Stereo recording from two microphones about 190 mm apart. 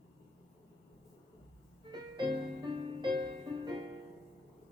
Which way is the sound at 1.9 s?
25° right (ahead or behind).